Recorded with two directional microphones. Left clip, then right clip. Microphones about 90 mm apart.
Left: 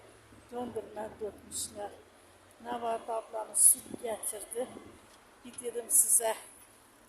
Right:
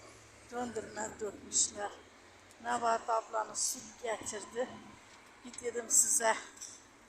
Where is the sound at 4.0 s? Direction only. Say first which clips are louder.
Even; 35° left (ahead or behind).